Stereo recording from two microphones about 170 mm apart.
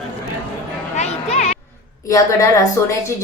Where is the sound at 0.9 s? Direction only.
40° left (ahead or behind).